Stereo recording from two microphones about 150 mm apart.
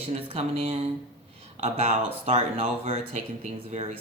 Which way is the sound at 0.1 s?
40° right (ahead or behind).